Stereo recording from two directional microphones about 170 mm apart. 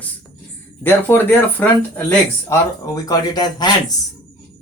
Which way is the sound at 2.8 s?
25° left (ahead or behind).